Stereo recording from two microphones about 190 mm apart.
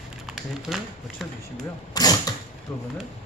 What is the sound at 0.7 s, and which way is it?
Speech, 5° left (ahead or behind).